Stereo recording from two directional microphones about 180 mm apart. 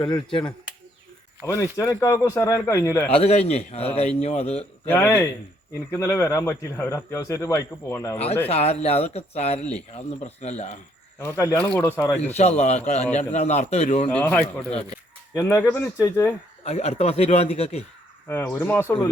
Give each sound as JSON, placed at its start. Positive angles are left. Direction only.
{"t": 0.0, "sound": "speech", "side_deg": 30}
{"t": 1.7, "sound": "a man's voice", "side_deg": 15}
{"t": 3.1, "sound": "speech", "side_deg": 35}
{"t": 4.9, "sound": "a man's voice", "side_deg": 10}
{"t": 8.4, "sound": "speech", "side_deg": 35}
{"t": 11.2, "sound": "a man's voice", "side_deg": 15}
{"t": 12.2, "sound": "speech", "side_deg": 35}
{"t": 14.1, "sound": "a man's voice", "side_deg": 10}
{"t": 16.6, "sound": "speech", "side_deg": 35}
{"t": 18.3, "sound": "a man's voice", "side_deg": 10}